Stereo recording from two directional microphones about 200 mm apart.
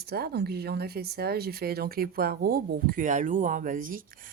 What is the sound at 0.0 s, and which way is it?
Speech, 50° right (ahead or behind).